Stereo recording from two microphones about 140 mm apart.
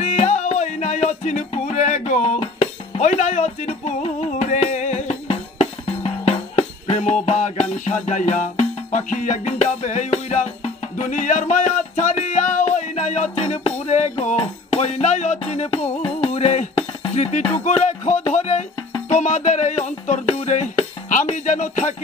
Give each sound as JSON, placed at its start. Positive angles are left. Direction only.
{"t": 0.0, "sound": "music", "side_deg": 55}